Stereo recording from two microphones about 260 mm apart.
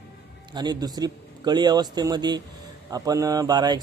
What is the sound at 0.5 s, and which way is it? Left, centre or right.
Speech, centre.